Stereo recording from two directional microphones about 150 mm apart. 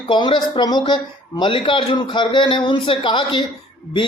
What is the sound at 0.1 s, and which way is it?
A man's voice, 30° left (ahead or behind).